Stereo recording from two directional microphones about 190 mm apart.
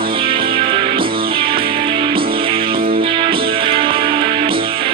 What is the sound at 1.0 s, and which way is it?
Music, 50° right (ahead or behind).